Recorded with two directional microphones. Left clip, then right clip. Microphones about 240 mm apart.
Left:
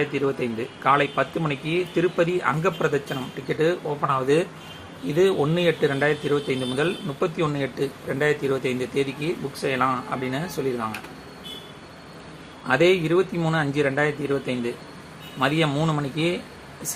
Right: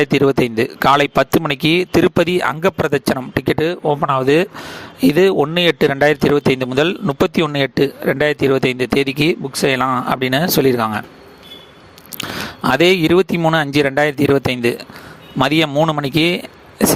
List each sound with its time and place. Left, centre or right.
0.0 s a man's voice: right
12.6 s a man's voice: right